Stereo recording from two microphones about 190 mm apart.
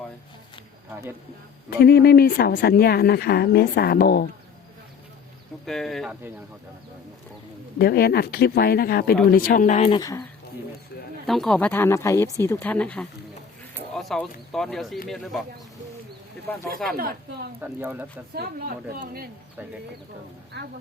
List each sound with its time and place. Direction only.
1.8 s speech: 55° left (ahead or behind)
5.6 s speech: centre (ahead or behind)
7.8 s speech: 55° left (ahead or behind); by 9.9 s 40° left (ahead or behind)
9.9 s speech: 20° left (ahead or behind)
11.3 s speech: centre (ahead or behind)
17.0 s a woman's voice: 50° right (ahead or behind)
17.6 s speech: 10° right (ahead or behind)
18.3 s a woman's voice: 50° right (ahead or behind)